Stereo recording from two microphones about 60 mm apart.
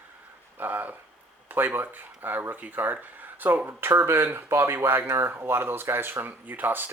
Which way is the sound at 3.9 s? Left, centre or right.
Right.